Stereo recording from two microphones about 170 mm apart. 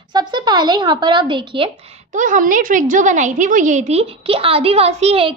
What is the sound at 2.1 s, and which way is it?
A woman's voice, 50° right (ahead or behind).